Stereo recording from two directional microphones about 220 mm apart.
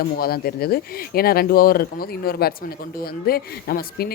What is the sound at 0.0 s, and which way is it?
Speech, 45° left (ahead or behind).